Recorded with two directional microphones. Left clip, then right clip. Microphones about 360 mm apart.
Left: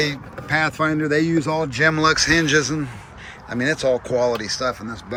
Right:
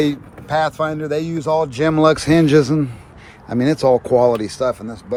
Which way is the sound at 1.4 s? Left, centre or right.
Centre.